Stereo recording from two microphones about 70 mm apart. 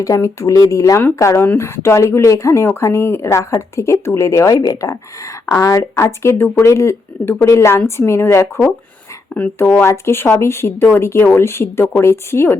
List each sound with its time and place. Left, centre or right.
0.0 s speech: left
1.5 s speech: left
6.0 s speech: left
9.6 s speech: left